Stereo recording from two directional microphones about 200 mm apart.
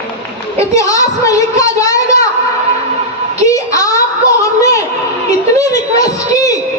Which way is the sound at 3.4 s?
15° left (ahead or behind).